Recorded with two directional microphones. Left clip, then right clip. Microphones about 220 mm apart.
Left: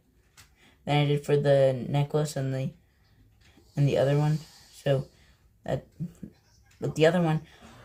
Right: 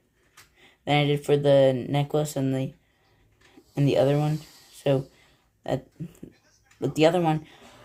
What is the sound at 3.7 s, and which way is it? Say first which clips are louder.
Speech: right 3 dB; 35° right (ahead or behind).